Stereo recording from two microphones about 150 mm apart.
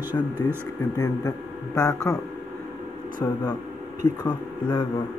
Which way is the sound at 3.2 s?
20° left (ahead or behind).